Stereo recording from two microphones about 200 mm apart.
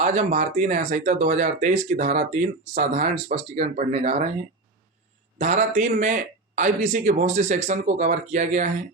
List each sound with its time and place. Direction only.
0.0 s speech: 35° right (ahead or behind)
5.4 s speech: 35° right (ahead or behind)